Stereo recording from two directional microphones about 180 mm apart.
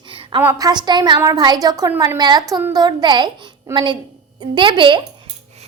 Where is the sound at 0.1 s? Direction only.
30° right (ahead or behind).